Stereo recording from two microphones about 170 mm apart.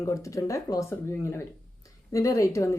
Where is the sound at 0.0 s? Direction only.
20° left (ahead or behind).